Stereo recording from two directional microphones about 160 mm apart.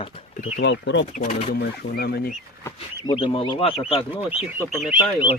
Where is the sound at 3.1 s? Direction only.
35° left (ahead or behind).